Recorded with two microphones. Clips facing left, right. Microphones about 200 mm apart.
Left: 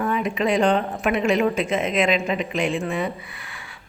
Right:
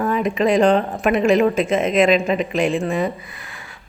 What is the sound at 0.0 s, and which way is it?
A woman's voice, 40° right (ahead or behind).